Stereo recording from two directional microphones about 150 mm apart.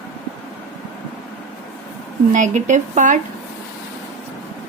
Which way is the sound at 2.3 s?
55° right (ahead or behind).